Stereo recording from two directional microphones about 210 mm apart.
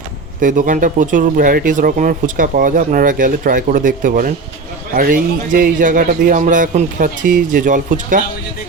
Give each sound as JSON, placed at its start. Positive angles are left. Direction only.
{"t": 0.3, "sound": "speech", "side_deg": -40}